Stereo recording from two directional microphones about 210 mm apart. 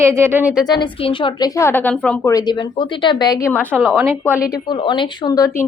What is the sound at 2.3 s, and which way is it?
A woman's voice, 20° left (ahead or behind).